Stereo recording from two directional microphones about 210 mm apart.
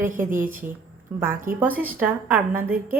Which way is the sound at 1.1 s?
5° right (ahead or behind).